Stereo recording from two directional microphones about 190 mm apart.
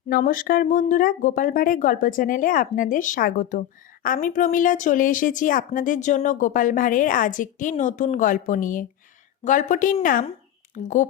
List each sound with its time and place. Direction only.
0.1 s speech: 45° left (ahead or behind)